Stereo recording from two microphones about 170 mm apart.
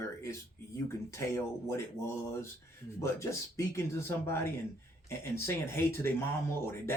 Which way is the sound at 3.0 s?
15° left (ahead or behind).